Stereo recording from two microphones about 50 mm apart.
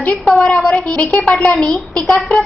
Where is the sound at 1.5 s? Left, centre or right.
Centre.